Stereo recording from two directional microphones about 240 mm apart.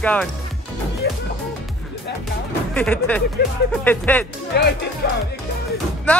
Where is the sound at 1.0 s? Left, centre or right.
Left.